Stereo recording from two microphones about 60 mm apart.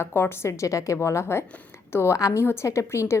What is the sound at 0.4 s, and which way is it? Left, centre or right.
Speech, left.